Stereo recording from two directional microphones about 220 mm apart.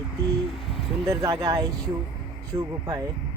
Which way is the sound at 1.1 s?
15° right (ahead or behind).